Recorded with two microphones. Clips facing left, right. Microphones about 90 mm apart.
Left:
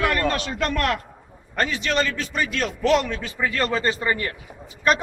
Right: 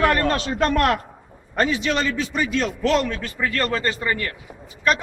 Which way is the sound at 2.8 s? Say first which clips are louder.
Left 3 dB; 10° left (ahead or behind).